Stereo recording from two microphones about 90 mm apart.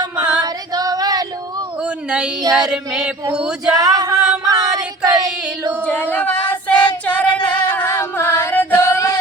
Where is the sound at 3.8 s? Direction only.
45° right (ahead or behind).